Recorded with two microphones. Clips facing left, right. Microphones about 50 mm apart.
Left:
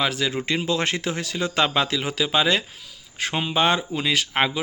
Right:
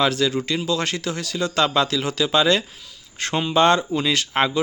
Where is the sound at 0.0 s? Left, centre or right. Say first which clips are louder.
Right 4 dB; centre.